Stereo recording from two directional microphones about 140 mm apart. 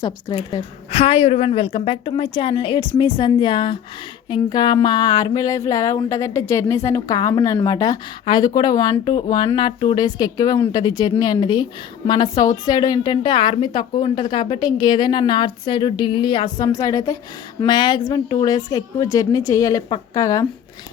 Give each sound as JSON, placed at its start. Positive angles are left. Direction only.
{"t": 0.0, "sound": "a woman's voice", "side_deg": 30}
{"t": 0.9, "sound": "a woman's voice", "side_deg": 45}
{"t": 4.3, "sound": "a sound", "side_deg": 30}
{"t": 10.7, "sound": "a woman's voice", "side_deg": 30}
{"t": 17.7, "sound": "a woman's voice", "side_deg": 35}
{"t": 18.4, "sound": "a sound", "side_deg": 25}